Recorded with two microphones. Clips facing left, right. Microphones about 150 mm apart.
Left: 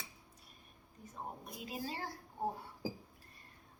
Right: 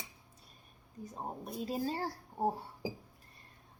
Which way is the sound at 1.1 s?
35° right (ahead or behind).